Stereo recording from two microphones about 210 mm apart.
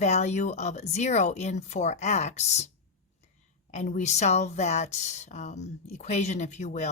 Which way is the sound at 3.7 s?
35° left (ahead or behind).